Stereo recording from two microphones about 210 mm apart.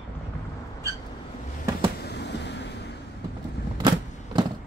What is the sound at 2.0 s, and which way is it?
Vehicle, 55° left (ahead or behind).